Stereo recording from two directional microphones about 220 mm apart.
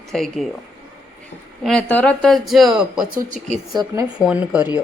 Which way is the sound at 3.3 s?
35° right (ahead or behind).